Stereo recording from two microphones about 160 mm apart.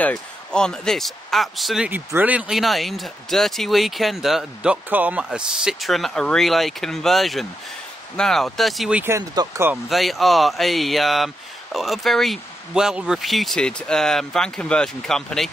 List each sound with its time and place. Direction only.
0.0 s speech: 5° left (ahead or behind)
1.9 s speech: 10° right (ahead or behind)
9.0 s speech: 20° right (ahead or behind)
9.7 s speech: centre (ahead or behind)